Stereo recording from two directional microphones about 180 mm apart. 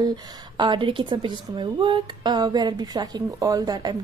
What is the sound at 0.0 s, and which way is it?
Speech, 25° right (ahead or behind).